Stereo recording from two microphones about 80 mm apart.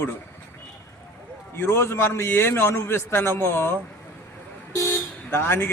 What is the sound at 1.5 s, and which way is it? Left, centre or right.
A man's voice, left.